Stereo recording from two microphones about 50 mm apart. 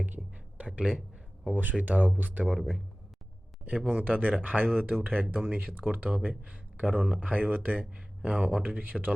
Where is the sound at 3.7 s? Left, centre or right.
Centre.